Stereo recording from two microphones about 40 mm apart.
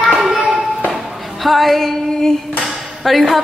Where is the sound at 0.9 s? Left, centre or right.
Centre.